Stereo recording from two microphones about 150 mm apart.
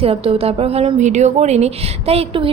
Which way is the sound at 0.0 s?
40° right (ahead or behind).